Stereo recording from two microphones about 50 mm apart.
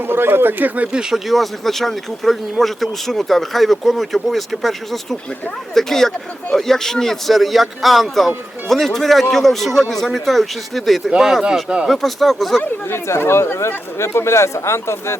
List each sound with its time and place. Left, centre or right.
0.0 s speech: right
1.3 s speech: centre
13.1 s speech: left